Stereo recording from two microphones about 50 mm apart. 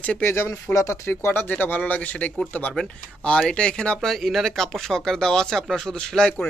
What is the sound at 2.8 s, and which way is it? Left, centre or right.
Speech, centre.